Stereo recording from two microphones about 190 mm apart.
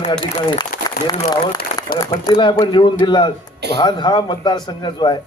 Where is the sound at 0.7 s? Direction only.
45° left (ahead or behind).